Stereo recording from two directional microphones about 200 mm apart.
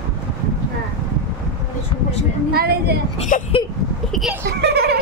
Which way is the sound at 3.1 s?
40° left (ahead or behind).